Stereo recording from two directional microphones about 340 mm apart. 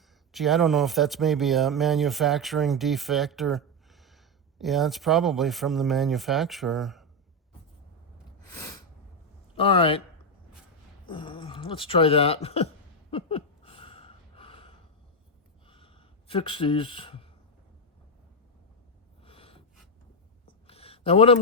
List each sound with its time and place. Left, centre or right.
0.3 s speech: centre
8.4 s sneeze: centre
9.6 s speech: centre
11.0 s a sound: centre
19.2 s gasp: centre
20.7 s a sound: centre